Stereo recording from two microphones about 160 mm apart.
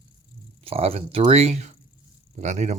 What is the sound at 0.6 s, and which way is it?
Speech, 40° right (ahead or behind).